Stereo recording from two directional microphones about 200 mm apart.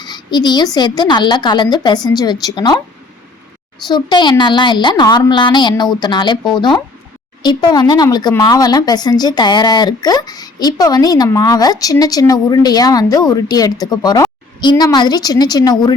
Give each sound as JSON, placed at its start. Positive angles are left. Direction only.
{"t": 0.0, "sound": "speech", "side_deg": 20}
{"t": 3.8, "sound": "speech", "side_deg": 20}